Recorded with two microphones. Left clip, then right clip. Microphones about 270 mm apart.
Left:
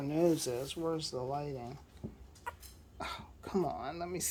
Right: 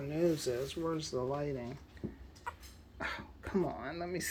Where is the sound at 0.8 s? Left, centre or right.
Centre.